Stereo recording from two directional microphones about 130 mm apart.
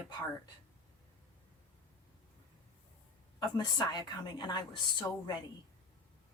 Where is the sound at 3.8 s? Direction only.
35° left (ahead or behind).